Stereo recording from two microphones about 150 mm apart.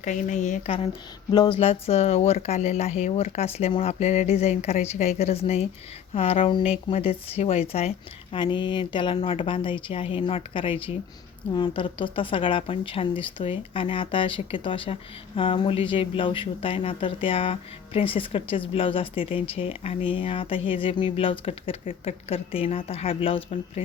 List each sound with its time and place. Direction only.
0.0 s speech: 55° left (ahead or behind)
1.3 s speech: 30° left (ahead or behind)
8.4 s speech: 30° left (ahead or behind)